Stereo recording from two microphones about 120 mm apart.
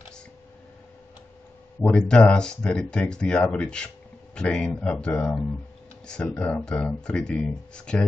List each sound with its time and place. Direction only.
1.8 s speech: 10° left (ahead or behind)